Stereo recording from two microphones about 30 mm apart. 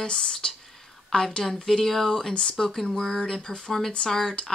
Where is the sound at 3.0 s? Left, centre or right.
Left.